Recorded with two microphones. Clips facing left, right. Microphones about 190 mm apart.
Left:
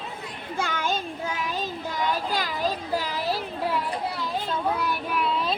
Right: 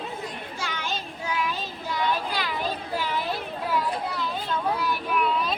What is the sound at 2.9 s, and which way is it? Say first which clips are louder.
Children playing: left 1 dB; 40° left (ahead or behind).